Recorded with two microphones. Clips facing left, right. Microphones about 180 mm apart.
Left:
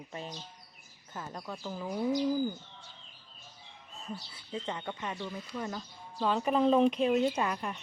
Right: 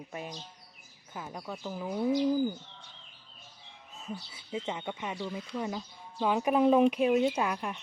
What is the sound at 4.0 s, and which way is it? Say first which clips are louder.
A woman's voice: right 1 dB; 5° right (ahead or behind).